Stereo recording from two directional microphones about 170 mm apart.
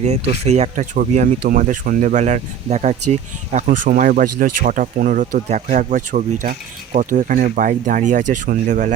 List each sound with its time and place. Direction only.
0.0 s speech: 40° right (ahead or behind)